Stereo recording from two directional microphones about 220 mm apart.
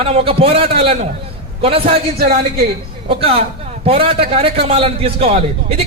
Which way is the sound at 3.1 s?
25° right (ahead or behind).